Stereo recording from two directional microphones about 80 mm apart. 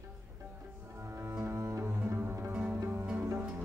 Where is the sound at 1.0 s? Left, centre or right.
Right.